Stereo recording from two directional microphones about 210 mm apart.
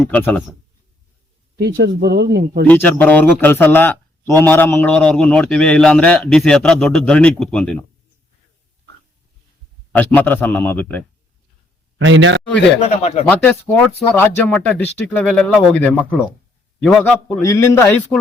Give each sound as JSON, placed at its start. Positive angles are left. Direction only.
{"t": 0.0, "sound": "speech", "side_deg": 10}
{"t": 1.5, "sound": "speech", "side_deg": -50}
{"t": 2.6, "sound": "speech", "side_deg": 10}
{"t": 9.9, "sound": "speech", "side_deg": 10}
{"t": 11.9, "sound": "a man's voice", "side_deg": -65}
{"t": 12.8, "sound": "speech", "side_deg": 30}
{"t": 13.2, "sound": "speech", "side_deg": 5}